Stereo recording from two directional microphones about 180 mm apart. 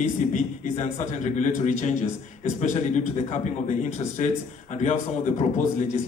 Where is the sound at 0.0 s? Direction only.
45° left (ahead or behind).